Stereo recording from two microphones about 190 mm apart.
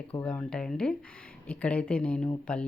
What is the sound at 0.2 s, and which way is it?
Speech, 5° left (ahead or behind).